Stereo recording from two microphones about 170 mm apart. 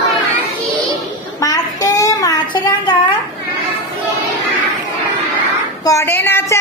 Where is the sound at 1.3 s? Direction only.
20° left (ahead or behind).